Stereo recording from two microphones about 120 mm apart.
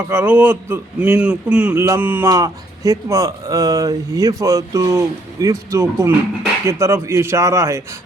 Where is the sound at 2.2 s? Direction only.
30° right (ahead or behind).